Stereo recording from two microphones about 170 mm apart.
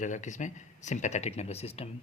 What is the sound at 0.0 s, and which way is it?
Speech, 45° left (ahead or behind).